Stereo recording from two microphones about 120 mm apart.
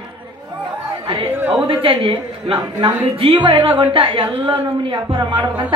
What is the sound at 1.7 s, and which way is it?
A woman's voice, 45° right (ahead or behind).